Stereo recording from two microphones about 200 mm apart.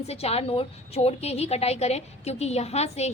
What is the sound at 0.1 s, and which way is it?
A woman's voice, 30° left (ahead or behind).